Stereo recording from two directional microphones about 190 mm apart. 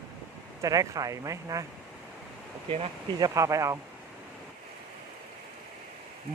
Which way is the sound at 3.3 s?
15° right (ahead or behind).